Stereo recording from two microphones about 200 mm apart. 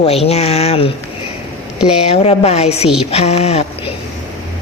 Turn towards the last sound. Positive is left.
turn(degrees=30)  # may be behind; listen again after turning